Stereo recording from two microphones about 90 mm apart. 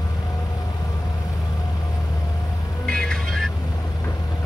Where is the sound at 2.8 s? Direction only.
5° left (ahead or behind).